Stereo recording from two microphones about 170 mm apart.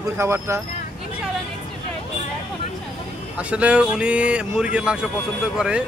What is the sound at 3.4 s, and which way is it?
Speech, 5° right (ahead or behind).